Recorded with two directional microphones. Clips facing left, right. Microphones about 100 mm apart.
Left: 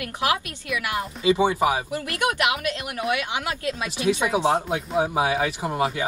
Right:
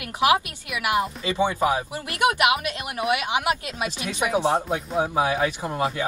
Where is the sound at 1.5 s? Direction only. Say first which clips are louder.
Left 1 dB; 15° left (ahead or behind).